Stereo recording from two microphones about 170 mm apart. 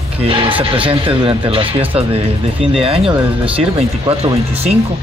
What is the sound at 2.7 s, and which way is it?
Speech, 35° right (ahead or behind).